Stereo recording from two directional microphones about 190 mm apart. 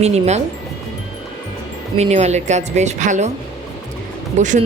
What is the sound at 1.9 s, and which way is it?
A woman's voice, 35° right (ahead or behind).